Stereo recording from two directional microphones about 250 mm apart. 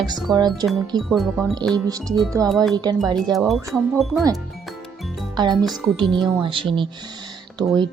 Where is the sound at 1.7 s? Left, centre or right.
Centre.